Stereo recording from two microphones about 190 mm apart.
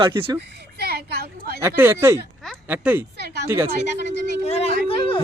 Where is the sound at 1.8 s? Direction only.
15° right (ahead or behind).